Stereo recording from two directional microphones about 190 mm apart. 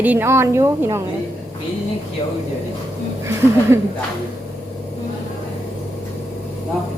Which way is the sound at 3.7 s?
15° right (ahead or behind).